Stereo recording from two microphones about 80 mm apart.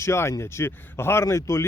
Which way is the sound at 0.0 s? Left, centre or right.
Left.